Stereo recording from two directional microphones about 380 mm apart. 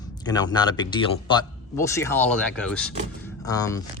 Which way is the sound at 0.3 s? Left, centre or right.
Centre.